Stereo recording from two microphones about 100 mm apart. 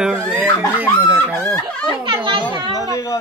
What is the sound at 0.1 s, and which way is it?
Giggle, 20° right (ahead or behind).